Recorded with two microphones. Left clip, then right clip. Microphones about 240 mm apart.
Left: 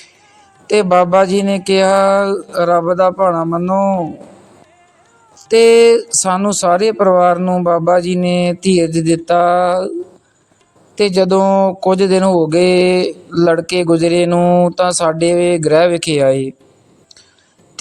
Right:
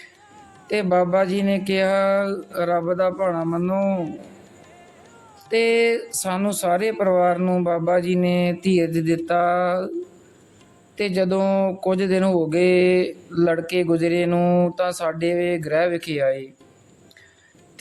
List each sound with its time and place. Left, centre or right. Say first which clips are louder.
0.7 s speech: left 9 dB; left
5.5 s speech: left 11 dB; left
10.9 s speech: left 10 dB; left